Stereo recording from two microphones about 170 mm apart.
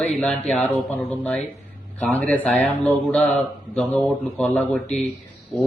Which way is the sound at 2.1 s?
10° left (ahead or behind).